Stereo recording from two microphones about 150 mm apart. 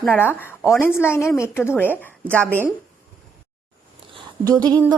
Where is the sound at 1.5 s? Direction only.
15° left (ahead or behind).